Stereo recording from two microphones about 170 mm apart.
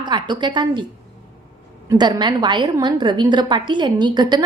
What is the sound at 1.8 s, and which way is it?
A woman's voice, 25° right (ahead or behind).